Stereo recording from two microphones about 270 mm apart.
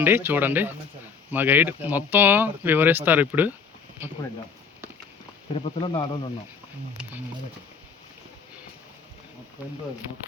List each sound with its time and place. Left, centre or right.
0.0 s speech: centre
5.5 s speech: centre
6.9 s speech: centre